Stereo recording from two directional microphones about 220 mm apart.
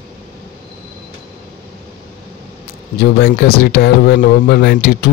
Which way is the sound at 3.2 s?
45° left (ahead or behind).